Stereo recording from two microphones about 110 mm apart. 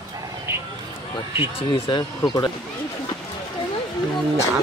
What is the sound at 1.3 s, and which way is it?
Speech, 50° left (ahead or behind).